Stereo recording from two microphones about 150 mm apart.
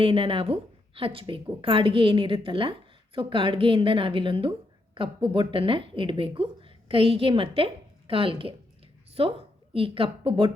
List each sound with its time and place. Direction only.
0.0 s speech: 40° right (ahead or behind)
9.7 s speech: 35° right (ahead or behind)